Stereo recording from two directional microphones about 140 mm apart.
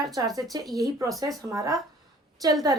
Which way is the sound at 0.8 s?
25° right (ahead or behind).